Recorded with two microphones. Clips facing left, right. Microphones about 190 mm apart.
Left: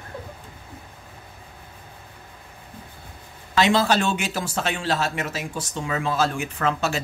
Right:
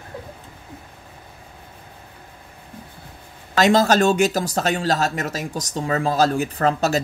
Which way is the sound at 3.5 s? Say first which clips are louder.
Right 4 dB; 40° right (ahead or behind).